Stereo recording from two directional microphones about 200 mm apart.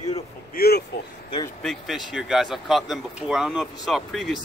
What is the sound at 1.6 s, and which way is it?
Speech, centre (ahead or behind).